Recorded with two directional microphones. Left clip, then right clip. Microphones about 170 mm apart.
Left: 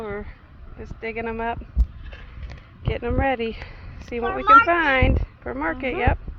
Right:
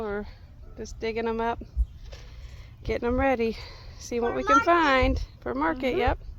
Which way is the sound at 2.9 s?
45° right (ahead or behind).